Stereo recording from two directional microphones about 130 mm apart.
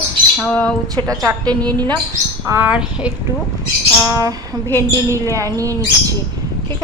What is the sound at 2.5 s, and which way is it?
Speech, 10° right (ahead or behind).